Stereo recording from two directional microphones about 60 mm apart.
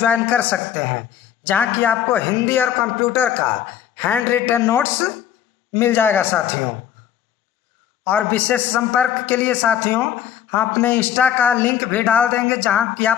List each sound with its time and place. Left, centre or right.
0.0 s a man's voice: left
4.6 s a man's voice: left
8.0 s a man's voice: left